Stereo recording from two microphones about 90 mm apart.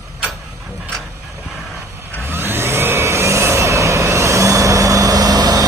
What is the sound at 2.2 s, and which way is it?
Vehicle, 25° right (ahead or behind).